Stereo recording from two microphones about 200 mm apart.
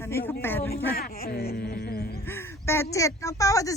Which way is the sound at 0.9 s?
50° left (ahead or behind).